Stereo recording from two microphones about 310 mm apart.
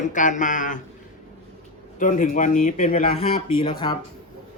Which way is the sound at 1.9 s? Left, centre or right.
Left.